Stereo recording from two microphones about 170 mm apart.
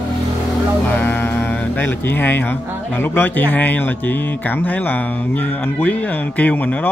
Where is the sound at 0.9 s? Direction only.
10° left (ahead or behind).